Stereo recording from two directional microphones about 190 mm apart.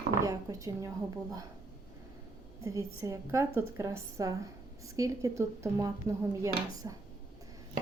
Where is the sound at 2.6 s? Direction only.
15° right (ahead or behind).